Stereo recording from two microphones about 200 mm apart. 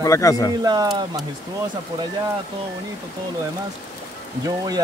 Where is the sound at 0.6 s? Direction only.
20° right (ahead or behind).